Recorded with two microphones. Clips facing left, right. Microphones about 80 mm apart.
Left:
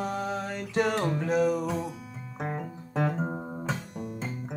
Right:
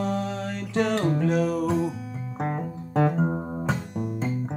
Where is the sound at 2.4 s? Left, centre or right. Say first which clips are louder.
Right 4 dB; right.